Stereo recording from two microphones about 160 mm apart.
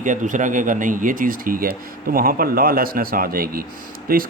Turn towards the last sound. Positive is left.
turn(degrees=-65)  # may be behind; listen again after turning